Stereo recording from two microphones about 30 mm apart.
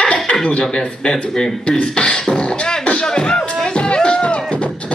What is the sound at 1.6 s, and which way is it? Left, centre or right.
Speech, left.